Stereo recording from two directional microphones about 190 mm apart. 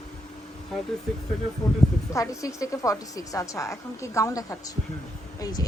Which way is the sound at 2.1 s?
15° left (ahead or behind).